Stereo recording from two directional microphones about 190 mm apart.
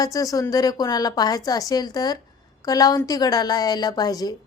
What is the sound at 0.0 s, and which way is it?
A woman's voice, 20° left (ahead or behind).